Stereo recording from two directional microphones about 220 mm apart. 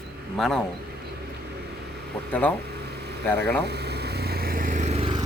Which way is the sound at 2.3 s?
5° left (ahead or behind).